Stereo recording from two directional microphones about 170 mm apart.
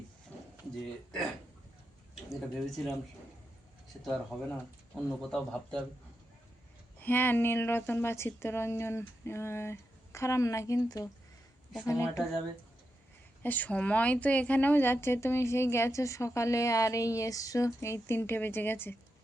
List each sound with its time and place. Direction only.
0.3 s a sound: 10° left (ahead or behind)
2.3 s a man's voice: centre (ahead or behind)
4.0 s a man's voice: centre (ahead or behind)
7.0 s a woman's voice: 10° left (ahead or behind)
13.4 s a woman's voice: 10° left (ahead or behind)